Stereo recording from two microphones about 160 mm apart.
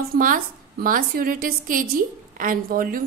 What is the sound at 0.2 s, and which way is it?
A woman's voice, 60° right (ahead or behind).